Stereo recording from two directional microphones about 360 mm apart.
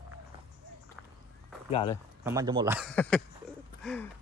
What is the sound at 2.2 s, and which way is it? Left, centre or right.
Speech, centre.